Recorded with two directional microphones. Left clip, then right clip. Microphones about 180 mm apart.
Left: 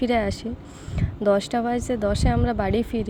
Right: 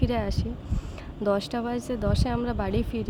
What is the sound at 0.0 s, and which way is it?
Speech, 20° left (ahead or behind).